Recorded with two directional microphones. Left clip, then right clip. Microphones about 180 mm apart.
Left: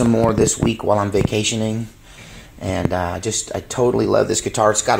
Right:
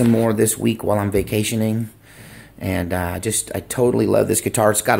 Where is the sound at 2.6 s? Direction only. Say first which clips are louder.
Left 2 dB; 30° right (ahead or behind).